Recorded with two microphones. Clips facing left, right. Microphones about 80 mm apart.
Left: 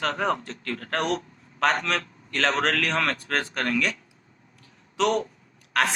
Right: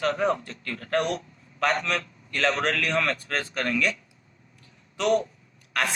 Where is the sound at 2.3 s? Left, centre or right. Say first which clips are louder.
Left 1 dB; left.